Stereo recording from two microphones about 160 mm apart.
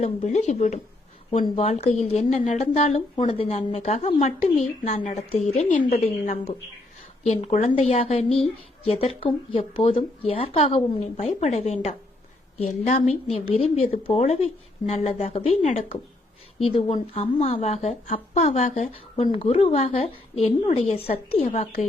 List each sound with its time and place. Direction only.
0.0 s a woman's voice: 45° left (ahead or behind)
6.2 s a woman's voice: 55° left (ahead or behind)
16.6 s a woman's voice: 35° left (ahead or behind)